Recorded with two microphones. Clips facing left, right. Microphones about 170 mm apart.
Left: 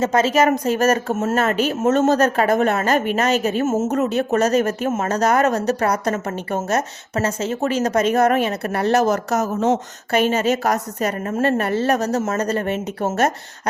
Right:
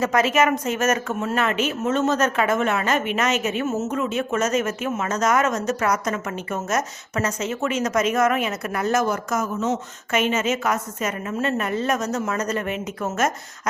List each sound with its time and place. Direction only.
0.0 s speech: 30° left (ahead or behind)